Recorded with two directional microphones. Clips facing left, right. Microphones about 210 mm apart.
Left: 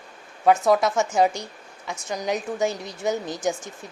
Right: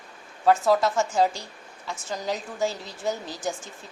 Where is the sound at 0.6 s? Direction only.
20° left (ahead or behind).